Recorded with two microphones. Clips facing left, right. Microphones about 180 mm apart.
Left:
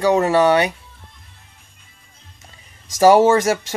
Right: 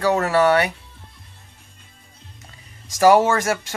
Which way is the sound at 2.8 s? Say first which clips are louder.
Left 3 dB; 20° left (ahead or behind).